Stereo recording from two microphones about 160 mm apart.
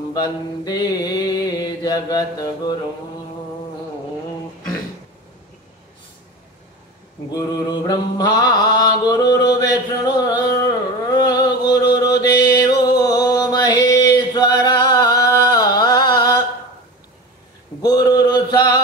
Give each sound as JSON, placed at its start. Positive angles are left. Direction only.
{"t": 0.1, "sound": "mantra", "side_deg": 25}
{"t": 7.2, "sound": "mantra", "side_deg": 25}
{"t": 11.1, "sound": "a sound", "side_deg": 25}
{"t": 12.4, "sound": "music", "side_deg": 25}
{"t": 17.8, "sound": "mantra", "side_deg": 25}